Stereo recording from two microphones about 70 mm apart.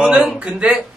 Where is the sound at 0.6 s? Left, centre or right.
Centre.